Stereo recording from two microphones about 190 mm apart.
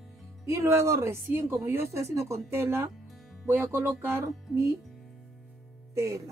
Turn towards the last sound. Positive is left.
turn(degrees=-15)  # may be behind; listen again after turning